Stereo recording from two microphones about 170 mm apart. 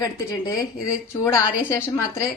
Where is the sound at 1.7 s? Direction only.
15° left (ahead or behind).